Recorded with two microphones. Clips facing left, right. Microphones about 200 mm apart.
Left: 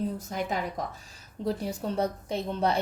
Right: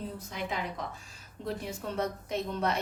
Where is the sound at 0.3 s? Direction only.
45° left (ahead or behind).